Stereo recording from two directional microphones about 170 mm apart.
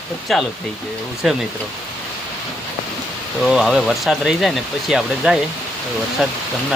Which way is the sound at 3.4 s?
Centre (ahead or behind).